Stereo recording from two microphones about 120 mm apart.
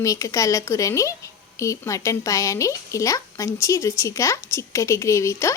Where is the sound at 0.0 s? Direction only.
30° left (ahead or behind).